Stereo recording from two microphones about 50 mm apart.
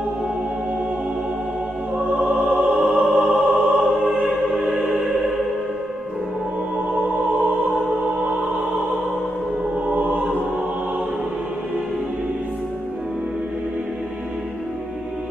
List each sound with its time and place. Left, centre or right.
2.1 s opera: centre
2.8 s music: centre
8.2 s music: centre
9.8 s music: right